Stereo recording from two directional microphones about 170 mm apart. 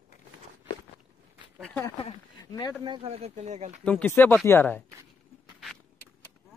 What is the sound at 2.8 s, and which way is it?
Speech, 30° right (ahead or behind).